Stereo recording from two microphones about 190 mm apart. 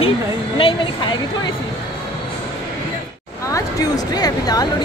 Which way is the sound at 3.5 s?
20° left (ahead or behind).